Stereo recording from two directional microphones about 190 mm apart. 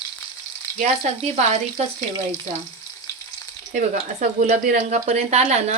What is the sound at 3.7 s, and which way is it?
A woman's voice, 35° right (ahead or behind).